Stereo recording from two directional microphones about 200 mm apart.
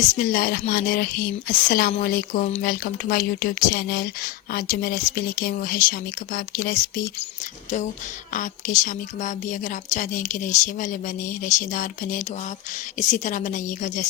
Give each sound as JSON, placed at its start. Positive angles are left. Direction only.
{"t": 0.2, "sound": "speech", "side_deg": 45}
{"t": 8.3, "sound": "a woman's voice", "side_deg": 40}